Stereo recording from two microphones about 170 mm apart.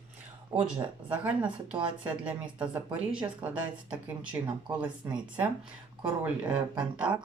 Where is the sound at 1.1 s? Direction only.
5° right (ahead or behind).